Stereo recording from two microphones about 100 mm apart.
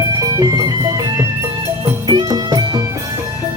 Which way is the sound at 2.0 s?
45° right (ahead or behind).